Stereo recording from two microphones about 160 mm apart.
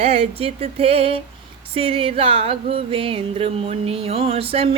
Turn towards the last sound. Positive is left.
turn(degrees=-35)  # may be behind; listen again after turning